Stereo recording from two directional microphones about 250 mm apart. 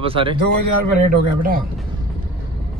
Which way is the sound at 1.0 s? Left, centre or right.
Right.